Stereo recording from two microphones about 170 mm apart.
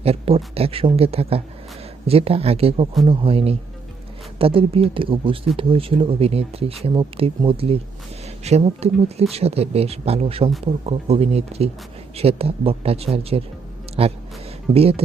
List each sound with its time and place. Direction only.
0.0 s speech: 35° right (ahead or behind)